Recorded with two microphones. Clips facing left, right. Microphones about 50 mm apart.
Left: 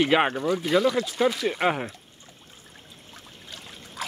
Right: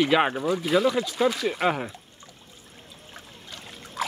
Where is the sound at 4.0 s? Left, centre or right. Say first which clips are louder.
Right 5 dB; centre.